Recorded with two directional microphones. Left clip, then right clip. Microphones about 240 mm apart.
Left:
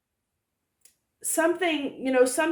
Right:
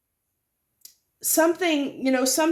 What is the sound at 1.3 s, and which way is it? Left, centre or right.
Speech, right.